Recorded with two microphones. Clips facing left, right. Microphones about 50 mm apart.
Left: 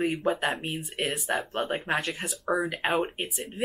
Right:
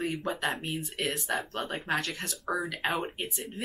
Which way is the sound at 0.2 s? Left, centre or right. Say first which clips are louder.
Left 4 dB; centre.